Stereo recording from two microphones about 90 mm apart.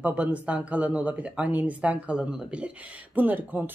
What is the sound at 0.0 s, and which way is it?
A man's voice, 15° right (ahead or behind).